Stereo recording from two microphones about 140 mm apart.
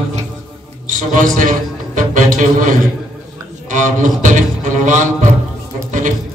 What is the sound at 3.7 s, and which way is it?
Speech, 65° right (ahead or behind).